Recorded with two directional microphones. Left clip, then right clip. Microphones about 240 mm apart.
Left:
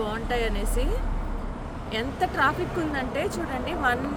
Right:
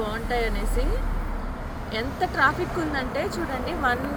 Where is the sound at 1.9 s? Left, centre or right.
Centre.